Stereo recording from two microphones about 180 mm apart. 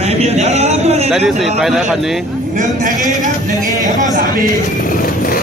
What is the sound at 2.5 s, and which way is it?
Speech, 45° right (ahead or behind).